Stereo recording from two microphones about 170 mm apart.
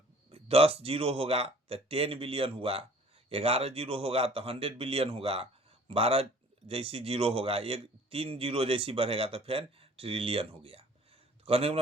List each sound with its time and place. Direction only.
0.3 s a man's voice: 35° right (ahead or behind)